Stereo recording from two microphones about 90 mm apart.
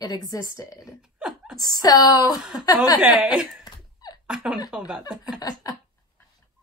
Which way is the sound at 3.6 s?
50° left (ahead or behind).